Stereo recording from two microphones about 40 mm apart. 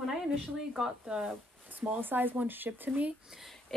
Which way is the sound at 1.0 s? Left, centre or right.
Right.